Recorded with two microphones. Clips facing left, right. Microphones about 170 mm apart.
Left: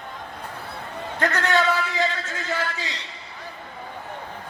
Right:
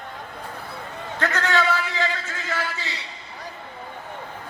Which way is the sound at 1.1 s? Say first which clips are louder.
Left 1 dB; 15° left (ahead or behind).